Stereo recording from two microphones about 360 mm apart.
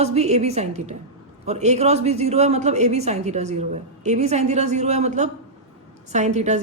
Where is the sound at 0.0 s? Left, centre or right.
Centre.